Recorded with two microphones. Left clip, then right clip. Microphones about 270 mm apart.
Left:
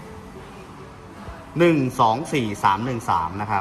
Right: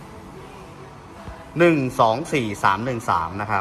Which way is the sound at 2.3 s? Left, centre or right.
Left.